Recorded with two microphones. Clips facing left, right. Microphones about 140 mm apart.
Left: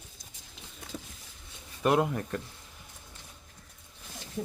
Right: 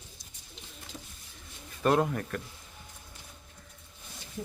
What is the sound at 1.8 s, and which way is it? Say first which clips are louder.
Speech: even; 15° left (ahead or behind).